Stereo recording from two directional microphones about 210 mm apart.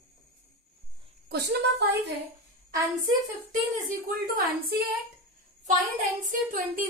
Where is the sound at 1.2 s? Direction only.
50° right (ahead or behind).